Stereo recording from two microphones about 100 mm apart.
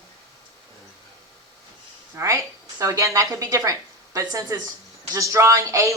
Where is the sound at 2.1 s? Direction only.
30° right (ahead or behind).